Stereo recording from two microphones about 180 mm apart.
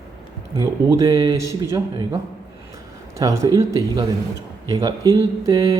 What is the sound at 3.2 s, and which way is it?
Mantra, 20° right (ahead or behind).